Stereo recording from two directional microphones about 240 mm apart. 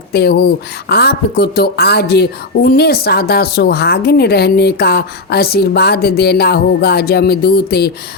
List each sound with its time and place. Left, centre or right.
0.1 s a woman's voice: left